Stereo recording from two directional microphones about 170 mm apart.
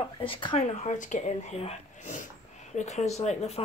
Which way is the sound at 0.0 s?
30° left (ahead or behind).